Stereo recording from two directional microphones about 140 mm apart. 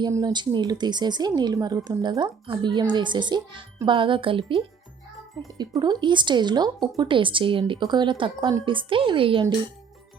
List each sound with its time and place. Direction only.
0.0 s a woman's voice: 25° right (ahead or behind)